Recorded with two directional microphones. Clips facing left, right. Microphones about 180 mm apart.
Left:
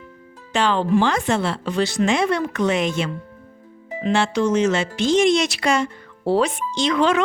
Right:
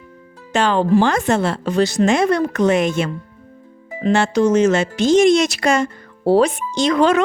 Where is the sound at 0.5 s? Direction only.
45° right (ahead or behind).